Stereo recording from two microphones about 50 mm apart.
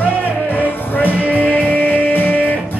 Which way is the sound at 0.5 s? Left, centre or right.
Left.